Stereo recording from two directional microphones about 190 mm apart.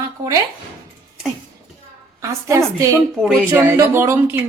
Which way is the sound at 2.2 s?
15° right (ahead or behind).